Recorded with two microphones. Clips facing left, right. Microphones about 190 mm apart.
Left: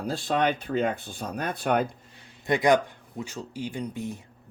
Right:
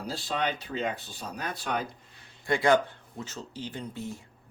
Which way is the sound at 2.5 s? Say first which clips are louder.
Left 2 dB; 15° left (ahead or behind).